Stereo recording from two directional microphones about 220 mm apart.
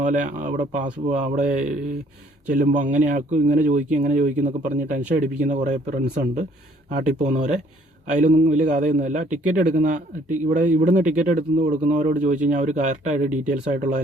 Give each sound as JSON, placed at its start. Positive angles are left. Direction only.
{"t": 0.0, "sound": "speech", "side_deg": -35}